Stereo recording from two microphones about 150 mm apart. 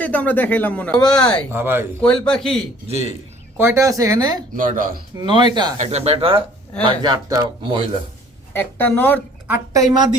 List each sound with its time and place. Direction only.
0.0 s speech: 10° left (ahead or behind)
1.5 s speech: 15° right (ahead or behind)
2.0 s a man's voice: 5° left (ahead or behind)
2.8 s speech: 45° right (ahead or behind)
3.6 s speech: 20° right (ahead or behind)
4.5 s speech: 65° right (ahead or behind)
5.1 s speech: 30° right (ahead or behind)
5.7 s speech: 50° right (ahead or behind); by 7.8 s 25° right (ahead or behind)
8.5 s speech: 10° left (ahead or behind)
9.7 s speech: 25° right (ahead or behind)